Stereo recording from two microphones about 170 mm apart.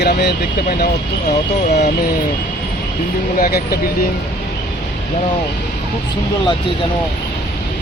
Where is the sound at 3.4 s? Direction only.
60° left (ahead or behind).